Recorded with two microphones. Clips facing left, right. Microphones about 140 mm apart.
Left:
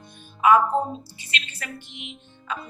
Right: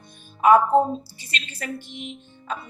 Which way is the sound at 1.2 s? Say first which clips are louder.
Right 1 dB; 40° right (ahead or behind).